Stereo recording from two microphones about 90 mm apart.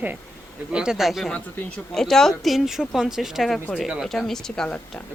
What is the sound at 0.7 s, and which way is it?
Speech, 10° right (ahead or behind).